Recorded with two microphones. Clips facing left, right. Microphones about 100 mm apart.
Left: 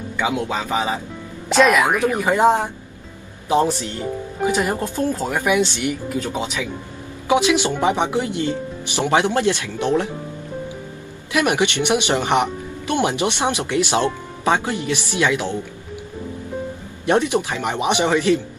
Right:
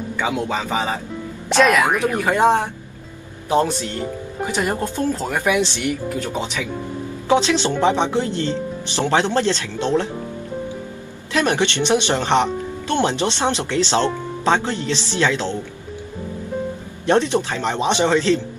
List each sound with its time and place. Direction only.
0.2 s speech: 5° left (ahead or behind)
11.3 s speech: 15° left (ahead or behind)
17.0 s speech: 15° left (ahead or behind)